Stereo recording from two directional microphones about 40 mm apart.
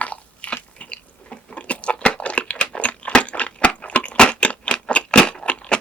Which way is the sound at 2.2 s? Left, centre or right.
Left.